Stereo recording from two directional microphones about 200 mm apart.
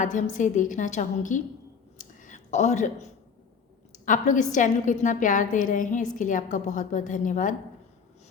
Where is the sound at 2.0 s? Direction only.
40° left (ahead or behind).